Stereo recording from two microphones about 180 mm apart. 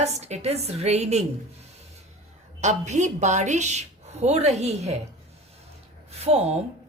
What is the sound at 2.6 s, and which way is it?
A woman's voice, 40° right (ahead or behind).